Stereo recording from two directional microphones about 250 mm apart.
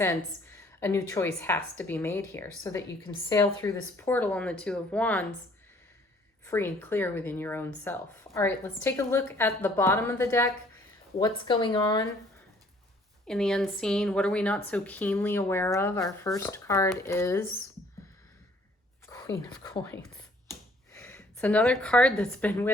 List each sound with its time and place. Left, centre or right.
0.4 s speech: centre
6.4 s speech: centre
13.2 s speech: centre
19.0 s speech: centre
21.0 s a woman's voice: centre